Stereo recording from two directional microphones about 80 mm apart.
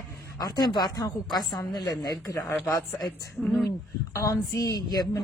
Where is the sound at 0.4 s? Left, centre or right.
Left.